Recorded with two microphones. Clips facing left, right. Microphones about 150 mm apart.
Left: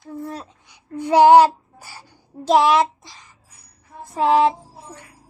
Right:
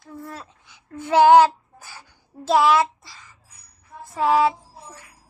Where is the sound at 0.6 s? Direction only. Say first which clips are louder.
Left 7 dB; 15° left (ahead or behind).